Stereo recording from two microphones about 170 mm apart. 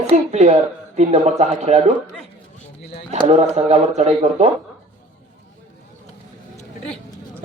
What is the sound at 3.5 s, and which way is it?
Speech, 40° right (ahead or behind).